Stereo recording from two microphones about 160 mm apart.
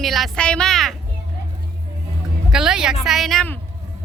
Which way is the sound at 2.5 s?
5° right (ahead or behind).